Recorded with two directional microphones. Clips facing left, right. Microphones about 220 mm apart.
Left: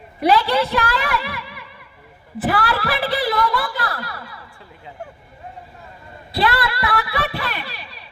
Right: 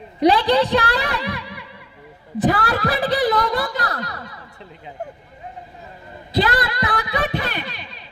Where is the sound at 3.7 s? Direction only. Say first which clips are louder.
Right 1 dB; 20° right (ahead or behind).